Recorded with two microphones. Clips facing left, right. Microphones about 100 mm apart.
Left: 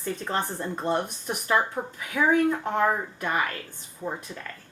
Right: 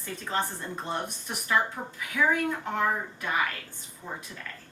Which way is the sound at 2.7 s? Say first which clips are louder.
Left 4 dB; 45° left (ahead or behind).